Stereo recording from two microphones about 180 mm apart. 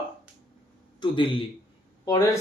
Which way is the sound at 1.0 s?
30° left (ahead or behind).